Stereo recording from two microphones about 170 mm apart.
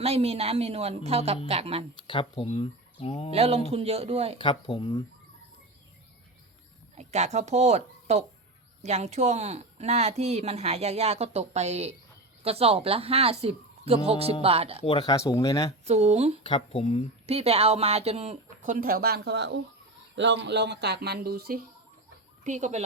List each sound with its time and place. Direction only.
0.0 s speech: 35° right (ahead or behind)
2.0 s speech: 30° left (ahead or behind)
3.3 s speech: 35° right (ahead or behind)
4.4 s speech: 30° left (ahead or behind)
6.9 s speech: 40° right (ahead or behind)
14.8 s speech: 25° left (ahead or behind)
15.9 s speech: 40° right (ahead or behind)
16.4 s speech: 30° left (ahead or behind)
17.2 s speech: 35° right (ahead or behind); by 21.6 s 65° right (ahead or behind)
22.4 s speech: 45° right (ahead or behind)